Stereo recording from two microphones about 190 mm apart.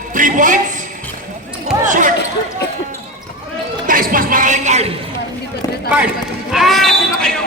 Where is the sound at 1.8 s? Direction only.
40° right (ahead or behind).